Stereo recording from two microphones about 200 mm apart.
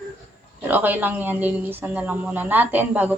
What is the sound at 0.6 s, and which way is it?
Speech, 10° right (ahead or behind).